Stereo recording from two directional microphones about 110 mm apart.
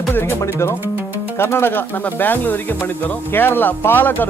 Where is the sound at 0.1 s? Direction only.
20° left (ahead or behind).